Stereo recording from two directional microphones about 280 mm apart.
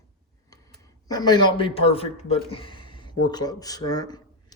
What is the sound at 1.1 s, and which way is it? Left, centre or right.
A man's voice, centre.